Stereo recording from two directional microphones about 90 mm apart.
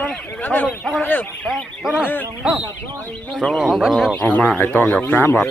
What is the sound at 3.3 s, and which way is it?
Speech, centre (ahead or behind).